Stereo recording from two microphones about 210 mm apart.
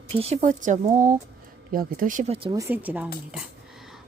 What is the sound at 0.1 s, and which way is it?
Speech, 30° right (ahead or behind).